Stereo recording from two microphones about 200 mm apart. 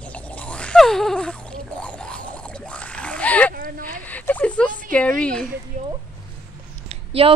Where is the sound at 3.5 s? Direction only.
45° right (ahead or behind).